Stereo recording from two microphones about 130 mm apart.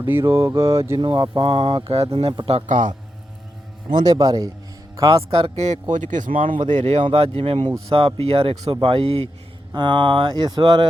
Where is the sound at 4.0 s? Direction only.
30° right (ahead or behind).